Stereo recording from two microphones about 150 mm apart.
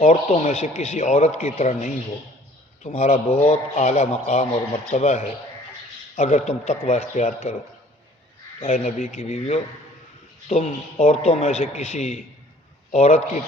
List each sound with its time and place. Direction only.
0.0 s a man's voice: 45° left (ahead or behind)
8.6 s a man's voice: 50° left (ahead or behind)